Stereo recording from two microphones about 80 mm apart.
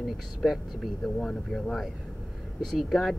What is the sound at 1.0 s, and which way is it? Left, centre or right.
Speech, centre.